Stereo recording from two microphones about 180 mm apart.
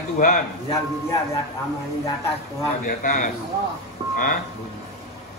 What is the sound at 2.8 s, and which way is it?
Speech, 50° left (ahead or behind).